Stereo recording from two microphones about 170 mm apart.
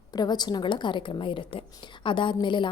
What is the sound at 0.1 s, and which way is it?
A woman's voice, 25° left (ahead or behind).